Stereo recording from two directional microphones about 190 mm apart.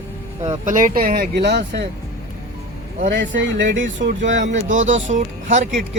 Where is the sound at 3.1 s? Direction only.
70° right (ahead or behind).